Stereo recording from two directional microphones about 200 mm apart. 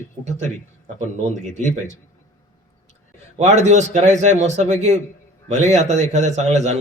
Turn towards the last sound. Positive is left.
turn(degrees=-35)  # may be behind; listen again after turning